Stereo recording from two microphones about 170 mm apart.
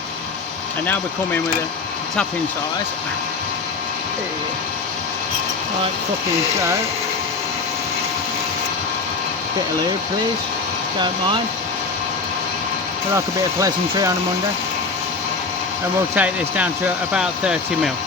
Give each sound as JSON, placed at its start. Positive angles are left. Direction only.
{"t": 13.1, "sound": "speech", "side_deg": -20}
{"t": 16.1, "sound": "speech", "side_deg": -10}